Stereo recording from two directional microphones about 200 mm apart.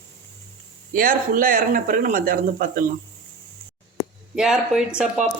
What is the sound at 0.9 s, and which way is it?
Speech, 45° right (ahead or behind).